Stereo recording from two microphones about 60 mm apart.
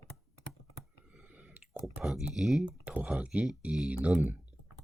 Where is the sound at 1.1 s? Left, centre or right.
Centre.